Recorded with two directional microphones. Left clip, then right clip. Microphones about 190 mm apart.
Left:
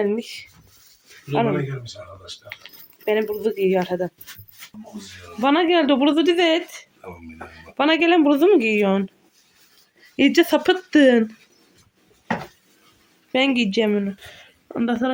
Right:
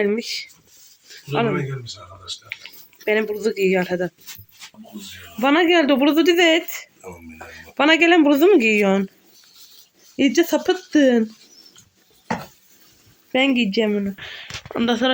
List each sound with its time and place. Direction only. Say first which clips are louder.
0.0 s speech: right 2 dB; centre (ahead or behind)
2.6 s speech: right 3 dB; centre (ahead or behind)
5.4 s speech: right 2 dB; 5° right (ahead or behind)
10.2 s speech: left 1 dB; 5° right (ahead or behind)
13.3 s speech: right 1 dB; 5° right (ahead or behind)